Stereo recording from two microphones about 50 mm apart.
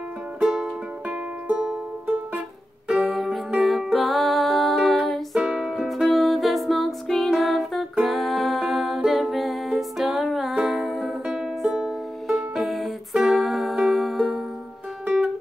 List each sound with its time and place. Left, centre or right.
0.4 s music: centre
1.0 s music: right
3.0 s music: centre
5.4 s music: centre
10.5 s music: centre
10.8 s music: centre
15.0 s music: right